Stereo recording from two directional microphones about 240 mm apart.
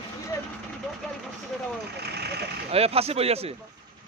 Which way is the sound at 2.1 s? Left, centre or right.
Right.